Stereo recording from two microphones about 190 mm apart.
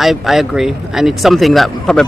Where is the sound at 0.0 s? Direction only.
Centre (ahead or behind).